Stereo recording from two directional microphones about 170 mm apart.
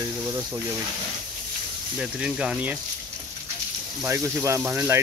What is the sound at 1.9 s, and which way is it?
Speech, 5° right (ahead or behind).